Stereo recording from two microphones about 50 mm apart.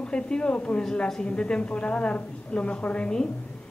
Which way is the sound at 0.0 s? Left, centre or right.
Centre.